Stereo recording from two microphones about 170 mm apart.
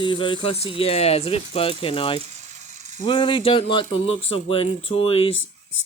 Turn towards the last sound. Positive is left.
turn(degrees=35)  # may be behind; listen again after turning